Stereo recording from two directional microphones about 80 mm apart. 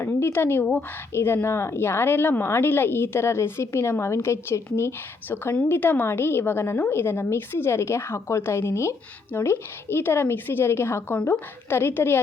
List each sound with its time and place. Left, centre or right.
0.0 s a woman's voice: left